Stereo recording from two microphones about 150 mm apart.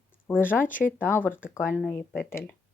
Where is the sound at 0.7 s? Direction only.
60° left (ahead or behind).